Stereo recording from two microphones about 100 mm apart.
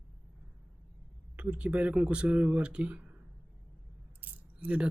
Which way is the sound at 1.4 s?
10° right (ahead or behind).